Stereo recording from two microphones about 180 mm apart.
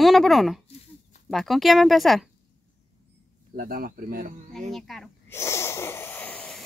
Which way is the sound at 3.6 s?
55° right (ahead or behind).